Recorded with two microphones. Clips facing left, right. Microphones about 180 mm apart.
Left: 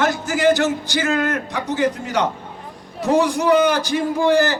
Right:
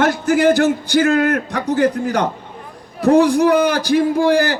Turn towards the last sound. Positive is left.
turn(degrees=-55)  # may be behind; listen again after turning